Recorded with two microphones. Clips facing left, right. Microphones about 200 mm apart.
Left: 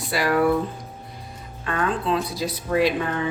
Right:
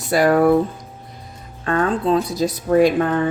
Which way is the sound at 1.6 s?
45° right (ahead or behind).